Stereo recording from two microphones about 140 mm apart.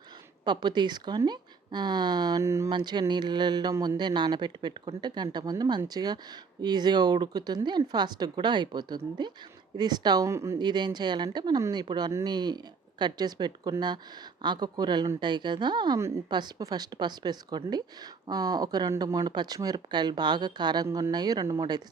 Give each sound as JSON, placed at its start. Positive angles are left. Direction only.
{"t": 0.4, "sound": "speech", "side_deg": -30}
{"t": 2.6, "sound": "a woman's voice", "side_deg": -30}
{"t": 10.6, "sound": "a woman's voice", "side_deg": -30}